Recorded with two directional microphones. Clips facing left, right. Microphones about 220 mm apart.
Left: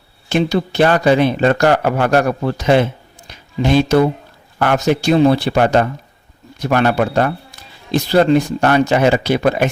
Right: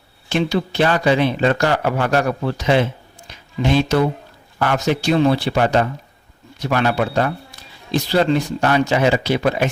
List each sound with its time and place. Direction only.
0.3 s a man's voice: 45° left (ahead or behind)
4.6 s a man's voice: 55° left (ahead or behind)